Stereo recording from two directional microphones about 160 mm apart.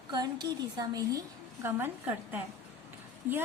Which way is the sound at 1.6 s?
10° right (ahead or behind).